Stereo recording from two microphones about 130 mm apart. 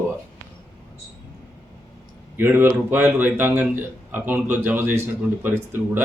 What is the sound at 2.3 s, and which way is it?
A man's voice, 15° right (ahead or behind).